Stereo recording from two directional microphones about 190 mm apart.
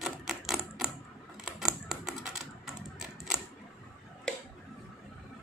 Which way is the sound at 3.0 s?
5° right (ahead or behind).